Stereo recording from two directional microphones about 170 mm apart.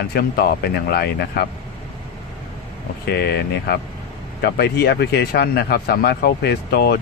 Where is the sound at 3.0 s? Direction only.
70° left (ahead or behind).